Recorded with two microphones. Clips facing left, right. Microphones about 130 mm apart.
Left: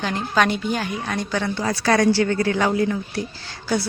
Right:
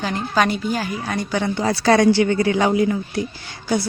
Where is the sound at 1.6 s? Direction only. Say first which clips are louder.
Right 4 dB; 30° right (ahead or behind).